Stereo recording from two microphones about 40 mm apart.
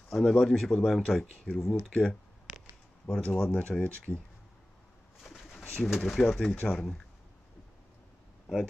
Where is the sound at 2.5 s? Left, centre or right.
Centre.